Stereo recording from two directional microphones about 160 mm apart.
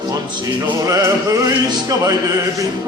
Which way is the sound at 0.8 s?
20° right (ahead or behind).